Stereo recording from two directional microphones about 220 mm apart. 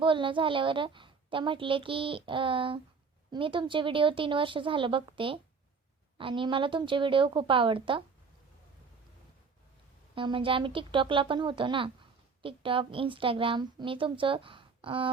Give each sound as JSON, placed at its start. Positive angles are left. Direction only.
{"t": 0.0, "sound": "a woman's voice", "side_deg": -20}
{"t": 10.2, "sound": "a woman's voice", "side_deg": -20}